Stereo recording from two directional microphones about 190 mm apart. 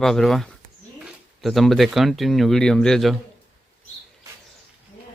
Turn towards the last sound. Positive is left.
turn(degrees=0)  # may be behind; listen again after turning